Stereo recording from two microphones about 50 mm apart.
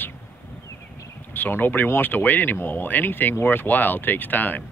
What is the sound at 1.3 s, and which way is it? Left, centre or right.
Speech, left.